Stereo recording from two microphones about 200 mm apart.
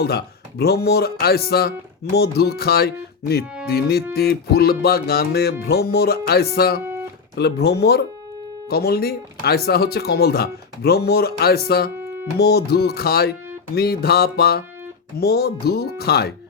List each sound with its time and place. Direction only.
0.0 s speech: 50° left (ahead or behind)
11.9 s music: 10° right (ahead or behind)
12.4 s speech: 55° left (ahead or behind)